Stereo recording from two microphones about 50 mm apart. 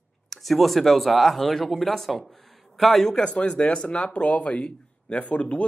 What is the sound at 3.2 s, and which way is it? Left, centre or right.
Speech, left.